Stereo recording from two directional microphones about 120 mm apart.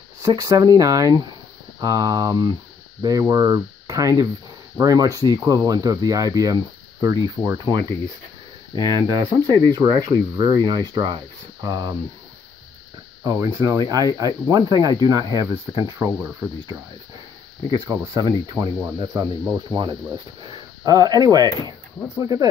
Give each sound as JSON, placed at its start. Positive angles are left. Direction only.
{"t": 0.2, "sound": "speech", "side_deg": -30}
{"t": 13.2, "sound": "speech", "side_deg": -30}
{"t": 17.6, "sound": "speech", "side_deg": -30}